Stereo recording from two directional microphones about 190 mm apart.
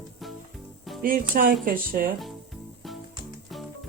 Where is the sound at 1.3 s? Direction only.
50° right (ahead or behind).